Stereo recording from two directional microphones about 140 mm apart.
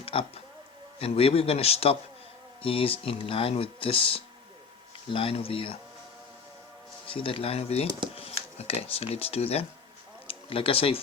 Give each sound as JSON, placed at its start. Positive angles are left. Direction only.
{"t": 0.0, "sound": "a sound", "side_deg": 40}
{"t": 0.9, "sound": "a man's voice", "side_deg": 45}
{"t": 7.1, "sound": "a man's voice", "side_deg": 40}